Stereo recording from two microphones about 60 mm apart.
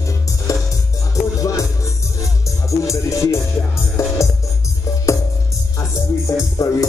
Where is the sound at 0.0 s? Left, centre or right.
Left.